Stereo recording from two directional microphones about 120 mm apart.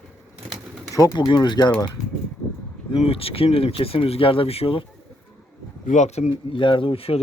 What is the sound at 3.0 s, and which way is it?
Speech, 50° left (ahead or behind).